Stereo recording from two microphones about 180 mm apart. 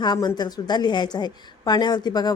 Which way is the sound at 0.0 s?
25° left (ahead or behind).